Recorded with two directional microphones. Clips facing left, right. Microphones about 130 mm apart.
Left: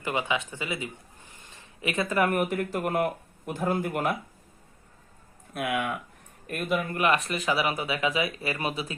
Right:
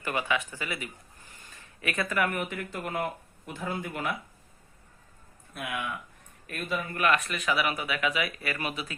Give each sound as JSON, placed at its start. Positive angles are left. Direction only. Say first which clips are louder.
{"t": 0.0, "sound": "speech", "louder": "left 1 dB", "side_deg": 20}
{"t": 2.2, "sound": "speech", "louder": "left 5 dB", "side_deg": 50}
{"t": 5.5, "sound": "speech", "louder": "left 6 dB", "side_deg": 65}
{"t": 6.9, "sound": "speech", "louder": "right 2 dB", "side_deg": 25}